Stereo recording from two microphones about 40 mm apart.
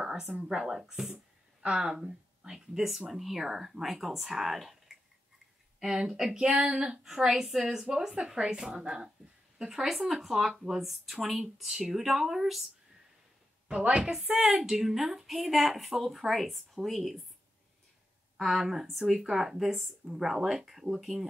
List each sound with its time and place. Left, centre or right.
0.0 s a sound: centre
0.5 s speech: centre
1.1 s a woman's voice: right; by 4.9 s centre
5.8 s a woman's voice: centre
7.2 s speech: centre
8.2 s speech: right
8.5 s a woman's voice: right; by 12.6 s centre
13.7 s speech: right
14.4 s a woman's voice: centre
18.4 s a woman's voice: centre